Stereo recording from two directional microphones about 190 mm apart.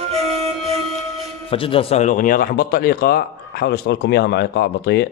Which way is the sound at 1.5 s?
30° left (ahead or behind).